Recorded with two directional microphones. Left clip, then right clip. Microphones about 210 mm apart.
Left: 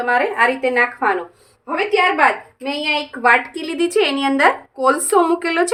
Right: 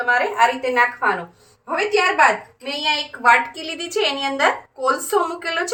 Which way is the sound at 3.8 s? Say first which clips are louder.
Left 5 dB; 55° left (ahead or behind).